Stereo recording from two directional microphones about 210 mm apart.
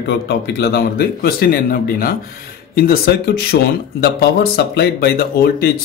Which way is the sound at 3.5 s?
50° left (ahead or behind).